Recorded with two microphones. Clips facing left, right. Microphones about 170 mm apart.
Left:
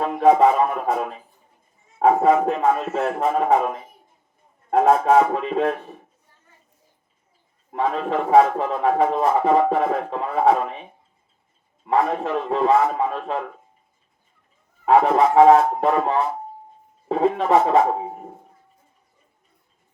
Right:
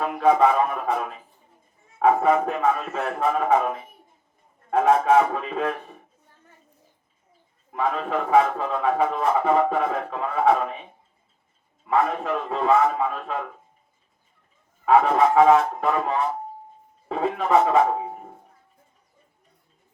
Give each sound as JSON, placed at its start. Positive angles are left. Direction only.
{"t": 0.0, "sound": "a man's voice", "side_deg": 40}
{"t": 4.7, "sound": "a man's voice", "side_deg": 35}
{"t": 7.7, "sound": "a man's voice", "side_deg": 35}
{"t": 11.9, "sound": "a man's voice", "side_deg": 35}
{"t": 14.8, "sound": "a man's voice", "side_deg": 35}